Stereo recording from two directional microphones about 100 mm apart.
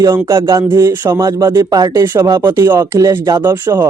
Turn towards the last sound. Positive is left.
turn(degrees=-25)  # may be behind; listen again after turning